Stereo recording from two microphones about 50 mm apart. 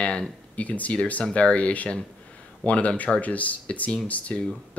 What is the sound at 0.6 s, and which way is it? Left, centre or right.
Speech, left.